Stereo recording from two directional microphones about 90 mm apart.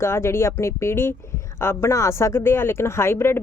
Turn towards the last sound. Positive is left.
turn(degrees=25)  # may be behind; listen again after turning